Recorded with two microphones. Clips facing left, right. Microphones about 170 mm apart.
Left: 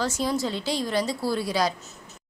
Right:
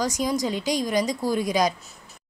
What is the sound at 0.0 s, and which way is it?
A woman's voice, 15° right (ahead or behind).